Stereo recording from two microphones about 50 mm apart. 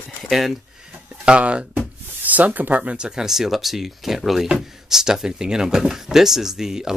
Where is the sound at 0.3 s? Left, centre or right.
Centre.